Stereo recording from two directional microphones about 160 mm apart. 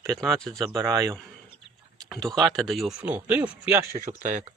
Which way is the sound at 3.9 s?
50° right (ahead or behind).